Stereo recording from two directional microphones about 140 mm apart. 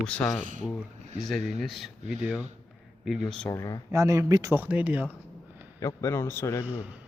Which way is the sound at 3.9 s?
20° right (ahead or behind).